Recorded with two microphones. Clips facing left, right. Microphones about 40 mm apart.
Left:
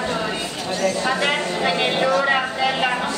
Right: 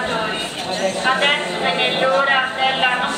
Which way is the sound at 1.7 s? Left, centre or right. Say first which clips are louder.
Right 2 dB; right.